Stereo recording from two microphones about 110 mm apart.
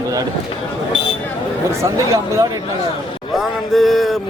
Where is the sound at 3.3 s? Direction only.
Centre (ahead or behind).